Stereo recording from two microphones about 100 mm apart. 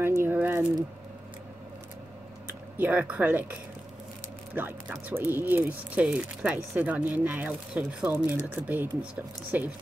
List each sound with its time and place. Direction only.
0.2 s a sound: 20° right (ahead or behind)
2.8 s speech: 15° right (ahead or behind)
4.6 s speech: 20° right (ahead or behind)